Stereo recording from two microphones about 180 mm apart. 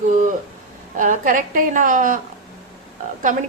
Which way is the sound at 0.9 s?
45° right (ahead or behind).